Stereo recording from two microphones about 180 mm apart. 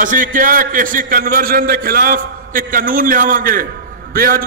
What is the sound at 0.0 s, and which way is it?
A man's voice, 50° right (ahead or behind).